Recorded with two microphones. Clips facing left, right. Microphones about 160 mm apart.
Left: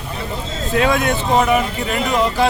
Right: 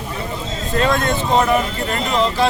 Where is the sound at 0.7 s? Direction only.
10° left (ahead or behind).